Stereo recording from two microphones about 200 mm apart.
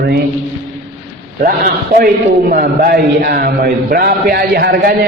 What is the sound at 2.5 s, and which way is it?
A man's voice, 50° right (ahead or behind).